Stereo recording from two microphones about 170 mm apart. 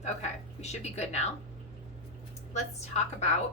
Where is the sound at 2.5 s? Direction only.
40° left (ahead or behind).